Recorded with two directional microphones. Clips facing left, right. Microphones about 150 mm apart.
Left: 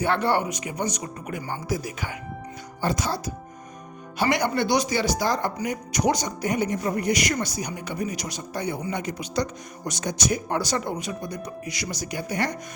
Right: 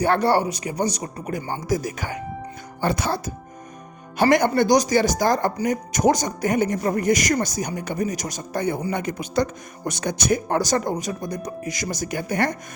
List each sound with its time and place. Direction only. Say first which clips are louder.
0.0 s speech: right 4 dB; 40° right (ahead or behind)
2.8 s speech: right 3 dB; 60° right (ahead or behind)